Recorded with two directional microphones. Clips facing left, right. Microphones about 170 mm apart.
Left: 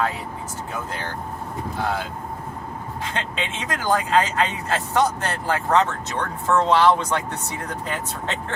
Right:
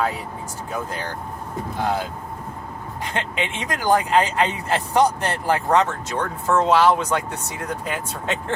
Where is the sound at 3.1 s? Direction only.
20° right (ahead or behind).